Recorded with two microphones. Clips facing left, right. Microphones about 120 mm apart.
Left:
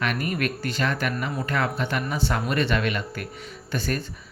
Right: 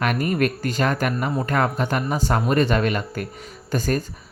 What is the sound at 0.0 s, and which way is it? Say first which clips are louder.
Speech: right 5 dB; 45° right (ahead or behind).